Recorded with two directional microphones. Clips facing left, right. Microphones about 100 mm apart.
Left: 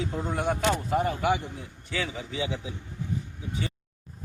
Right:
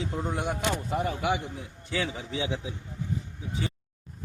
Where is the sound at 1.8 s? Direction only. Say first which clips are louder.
Right 1 dB; 30° right (ahead or behind).